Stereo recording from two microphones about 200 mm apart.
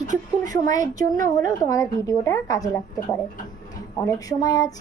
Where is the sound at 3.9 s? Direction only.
15° left (ahead or behind).